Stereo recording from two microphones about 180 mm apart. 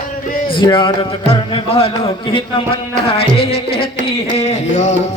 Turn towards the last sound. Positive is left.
turn(degrees=40)  # may be behind; listen again after turning